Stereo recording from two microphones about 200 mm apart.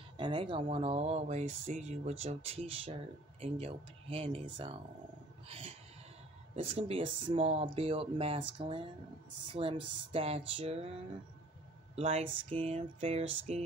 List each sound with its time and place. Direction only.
0.2 s speech: 25° right (ahead or behind)